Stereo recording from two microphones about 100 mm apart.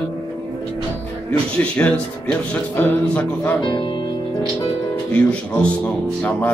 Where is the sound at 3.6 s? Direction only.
55° left (ahead or behind).